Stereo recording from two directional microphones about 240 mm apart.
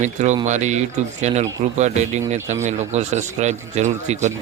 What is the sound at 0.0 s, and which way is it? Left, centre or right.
Speech, right.